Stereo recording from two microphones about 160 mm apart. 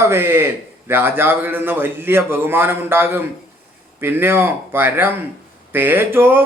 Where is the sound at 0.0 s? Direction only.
15° right (ahead or behind).